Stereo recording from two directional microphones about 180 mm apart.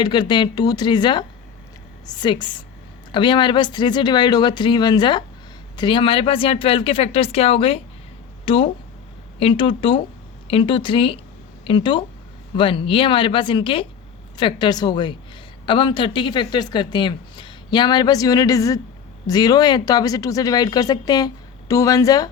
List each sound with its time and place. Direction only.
0.0 s speech: 25° left (ahead or behind)